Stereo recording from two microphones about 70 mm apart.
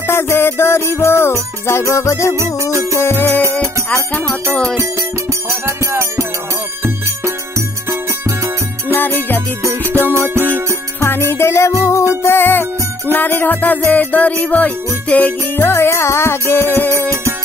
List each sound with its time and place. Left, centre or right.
0.1 s music: left
2.3 s music: right
2.9 s music: left
3.8 s music: centre
4.9 s music: right
8.9 s music: left
10.2 s music: right
11.0 s music: left